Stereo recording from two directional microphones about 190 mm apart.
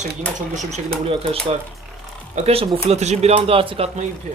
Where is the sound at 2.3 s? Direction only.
30° right (ahead or behind).